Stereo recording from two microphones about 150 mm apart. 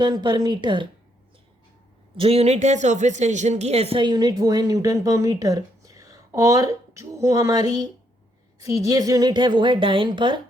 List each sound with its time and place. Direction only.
0.0 s speech: 30° right (ahead or behind)
2.1 s a woman's voice: 40° right (ahead or behind)